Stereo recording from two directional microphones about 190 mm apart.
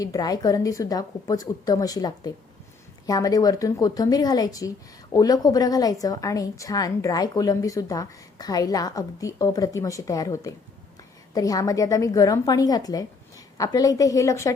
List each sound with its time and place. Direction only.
0.0 s a woman's voice: 20° left (ahead or behind)